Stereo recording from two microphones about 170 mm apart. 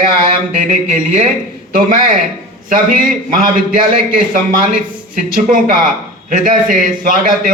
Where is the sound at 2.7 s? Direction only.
55° right (ahead or behind).